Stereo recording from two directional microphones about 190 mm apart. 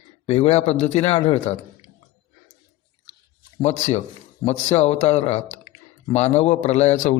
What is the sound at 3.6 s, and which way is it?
A man's voice, 35° left (ahead or behind).